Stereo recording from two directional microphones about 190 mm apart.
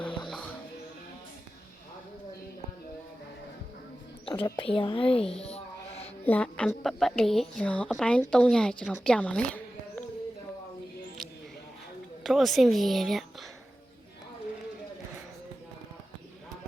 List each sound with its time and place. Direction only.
0.3 s music: centre (ahead or behind)
4.3 s speech: 25° left (ahead or behind)
5.1 s a woman's voice: 5° left (ahead or behind)
5.4 s a sound: 30° left (ahead or behind)
6.2 s a woman's voice: 10° left (ahead or behind)
12.2 s a woman's voice: centre (ahead or behind)